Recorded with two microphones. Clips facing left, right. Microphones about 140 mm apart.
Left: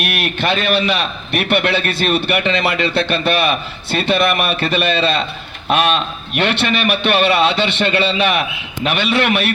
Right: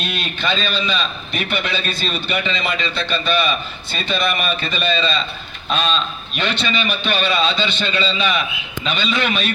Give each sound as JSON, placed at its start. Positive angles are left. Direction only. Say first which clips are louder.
{"t": 0.0, "sound": "a man's voice", "louder": "left 5 dB", "side_deg": 70}